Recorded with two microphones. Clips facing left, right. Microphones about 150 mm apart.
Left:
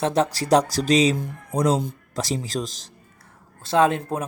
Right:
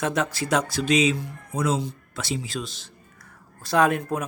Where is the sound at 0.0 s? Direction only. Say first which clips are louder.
Left 4 dB; 35° left (ahead or behind).